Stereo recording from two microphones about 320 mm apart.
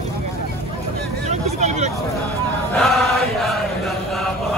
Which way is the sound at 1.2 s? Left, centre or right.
Right.